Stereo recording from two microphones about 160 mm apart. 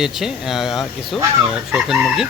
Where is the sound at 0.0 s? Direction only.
Centre (ahead or behind).